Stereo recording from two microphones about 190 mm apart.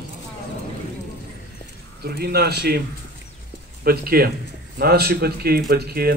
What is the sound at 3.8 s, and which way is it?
Speech, 55° right (ahead or behind).